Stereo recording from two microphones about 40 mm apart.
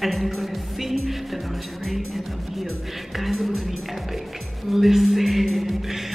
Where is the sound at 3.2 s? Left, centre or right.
Centre.